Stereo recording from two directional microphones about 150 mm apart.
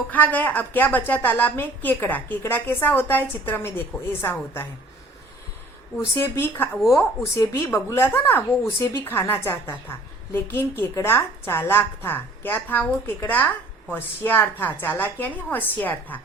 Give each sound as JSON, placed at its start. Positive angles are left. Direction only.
{"t": 0.1, "sound": "a woman's voice", "side_deg": 10}
{"t": 6.1, "sound": "a woman's voice", "side_deg": 15}